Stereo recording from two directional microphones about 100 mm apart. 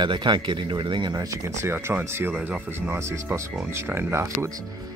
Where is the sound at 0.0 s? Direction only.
50° right (ahead or behind).